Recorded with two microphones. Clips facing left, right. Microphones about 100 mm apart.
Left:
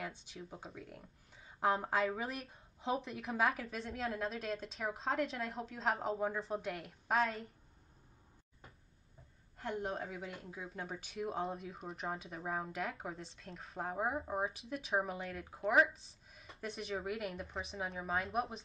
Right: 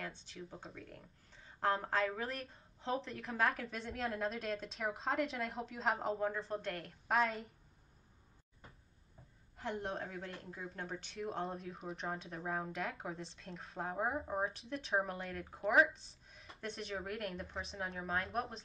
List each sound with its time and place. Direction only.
0.0 s speech: 5° left (ahead or behind)
9.6 s speech: centre (ahead or behind)